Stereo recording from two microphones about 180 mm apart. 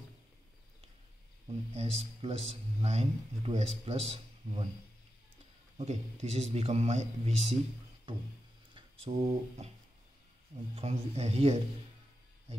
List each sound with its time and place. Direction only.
1.5 s a man's voice: 35° right (ahead or behind)
5.8 s a man's voice: 40° right (ahead or behind)
9.0 s a man's voice: 35° right (ahead or behind)
10.8 s a man's voice: 35° right (ahead or behind)